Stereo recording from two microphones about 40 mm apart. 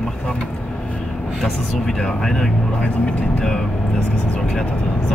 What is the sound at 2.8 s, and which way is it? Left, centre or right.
Speech, left.